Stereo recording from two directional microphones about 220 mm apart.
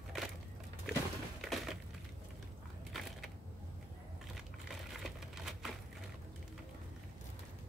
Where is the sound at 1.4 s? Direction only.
Centre (ahead or behind).